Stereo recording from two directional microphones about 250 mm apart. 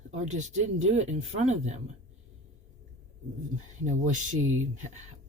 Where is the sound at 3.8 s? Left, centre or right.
Right.